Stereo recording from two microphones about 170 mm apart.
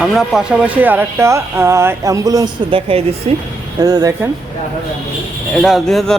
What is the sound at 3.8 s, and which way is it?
Speech, 20° right (ahead or behind).